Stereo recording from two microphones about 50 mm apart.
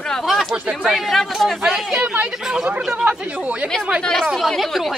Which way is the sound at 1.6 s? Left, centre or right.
Centre.